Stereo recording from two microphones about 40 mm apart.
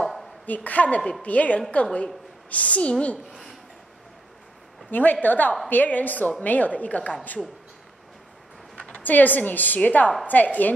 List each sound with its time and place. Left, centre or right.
0.0 s a sound: centre
0.5 s a woman's voice: left
4.9 s a woman's voice: left
9.0 s a woman's voice: left